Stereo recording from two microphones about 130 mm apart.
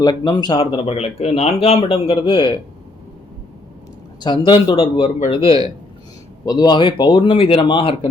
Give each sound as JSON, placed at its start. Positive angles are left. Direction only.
{"t": 0.0, "sound": "speech", "side_deg": 30}
{"t": 4.2, "sound": "speech", "side_deg": 35}
{"t": 6.4, "sound": "speech", "side_deg": 30}